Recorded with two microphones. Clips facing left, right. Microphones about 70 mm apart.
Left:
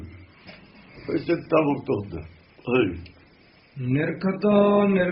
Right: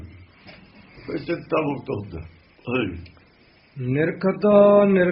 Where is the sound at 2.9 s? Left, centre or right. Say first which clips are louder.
Even; right.